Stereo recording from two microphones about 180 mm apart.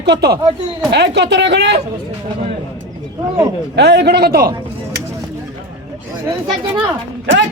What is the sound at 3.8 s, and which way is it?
Speech, 70° right (ahead or behind).